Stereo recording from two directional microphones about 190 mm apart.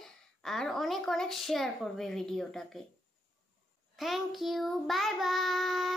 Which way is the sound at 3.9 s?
Centre (ahead or behind).